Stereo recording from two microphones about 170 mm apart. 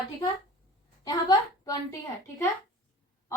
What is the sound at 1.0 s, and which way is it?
Speech, 25° left (ahead or behind).